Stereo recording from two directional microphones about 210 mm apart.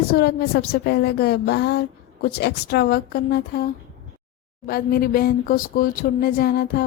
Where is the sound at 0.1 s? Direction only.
45° left (ahead or behind).